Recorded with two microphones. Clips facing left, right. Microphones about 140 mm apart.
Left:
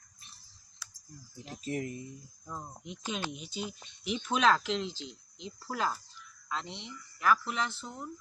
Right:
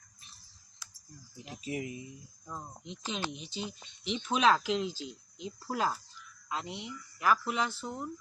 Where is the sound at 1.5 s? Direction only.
10° right (ahead or behind).